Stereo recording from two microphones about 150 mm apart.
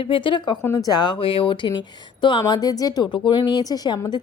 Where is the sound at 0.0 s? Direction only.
35° left (ahead or behind).